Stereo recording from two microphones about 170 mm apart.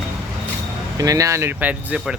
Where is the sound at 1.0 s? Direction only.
20° right (ahead or behind).